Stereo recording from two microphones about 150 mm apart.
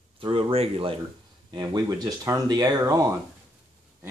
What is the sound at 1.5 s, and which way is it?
Speech, 30° right (ahead or behind).